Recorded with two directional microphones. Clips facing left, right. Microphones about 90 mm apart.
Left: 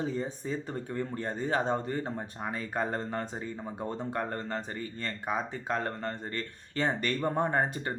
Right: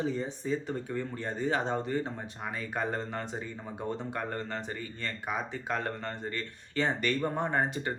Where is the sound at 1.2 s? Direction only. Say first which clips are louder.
Left 1 dB; 40° left (ahead or behind).